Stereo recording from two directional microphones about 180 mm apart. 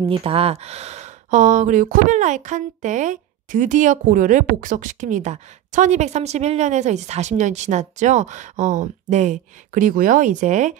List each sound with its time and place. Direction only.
0.0 s speech: 30° right (ahead or behind)